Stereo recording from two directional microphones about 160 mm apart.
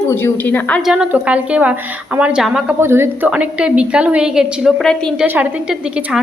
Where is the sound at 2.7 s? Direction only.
15° right (ahead or behind); by 5.1 s 5° left (ahead or behind).